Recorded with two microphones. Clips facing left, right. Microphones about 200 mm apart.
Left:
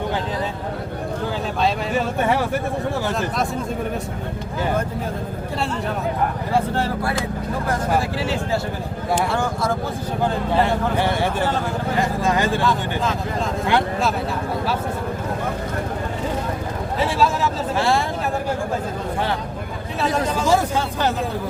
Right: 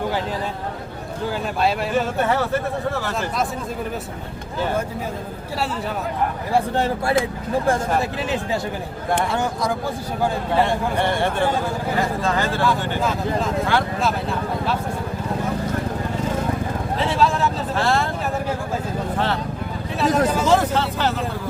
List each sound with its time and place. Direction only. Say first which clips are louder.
2.2 s speech: left 1 dB; 15° left (ahead or behind)
6.5 s speech: right 3 dB; 20° right (ahead or behind)
9.3 s speech: even; 20° right (ahead or behind)
10.6 s speech: even; 10° left (ahead or behind)
13.0 s speech: right 1 dB; 10° right (ahead or behind)
17.7 s speech: left 1 dB; 15° left (ahead or behind)
20.0 s speech: right 3 dB; 5° right (ahead or behind)
20.4 s speech: right 1 dB; 10° left (ahead or behind)